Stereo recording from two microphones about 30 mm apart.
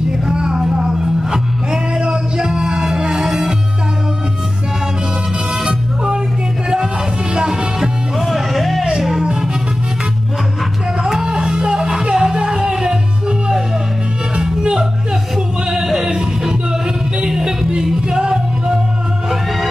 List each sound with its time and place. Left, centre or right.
0.3 s a sound: right
0.7 s music: right
8.2 s music: centre
11.2 s music: right
14.4 s music: right
15.3 s music: centre
17.4 s music: right